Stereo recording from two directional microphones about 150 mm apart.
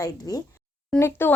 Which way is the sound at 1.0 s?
15° left (ahead or behind).